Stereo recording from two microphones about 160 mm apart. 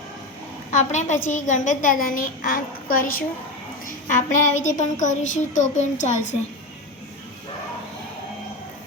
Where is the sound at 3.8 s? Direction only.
50° left (ahead or behind).